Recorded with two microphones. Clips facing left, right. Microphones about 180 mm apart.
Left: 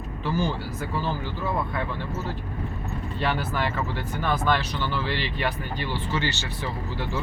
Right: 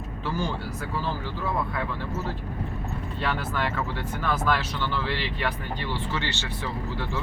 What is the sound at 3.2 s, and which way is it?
Speech, centre (ahead or behind).